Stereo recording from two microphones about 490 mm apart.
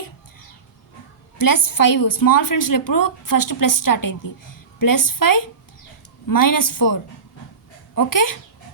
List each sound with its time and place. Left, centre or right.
1.4 s a woman's voice: left